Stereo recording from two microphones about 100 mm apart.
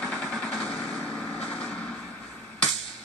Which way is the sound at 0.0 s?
5° left (ahead or behind).